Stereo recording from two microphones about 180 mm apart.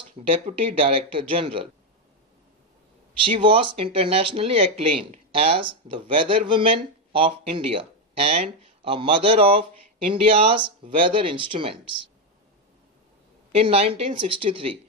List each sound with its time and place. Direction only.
0.2 s speech: 30° right (ahead or behind)
3.2 s speech: 30° right (ahead or behind)
13.6 s speech: 35° right (ahead or behind)